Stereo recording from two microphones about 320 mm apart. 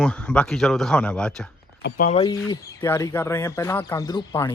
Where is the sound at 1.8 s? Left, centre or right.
Left.